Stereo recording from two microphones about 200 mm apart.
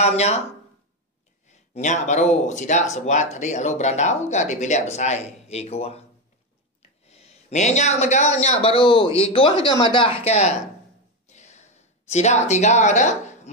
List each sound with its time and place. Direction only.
0.0 s speech: 35° left (ahead or behind)
1.5 s speech: 35° left (ahead or behind)
11.2 s a sound: 35° left (ahead or behind)